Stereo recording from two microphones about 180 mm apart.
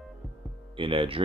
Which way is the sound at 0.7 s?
30° right (ahead or behind).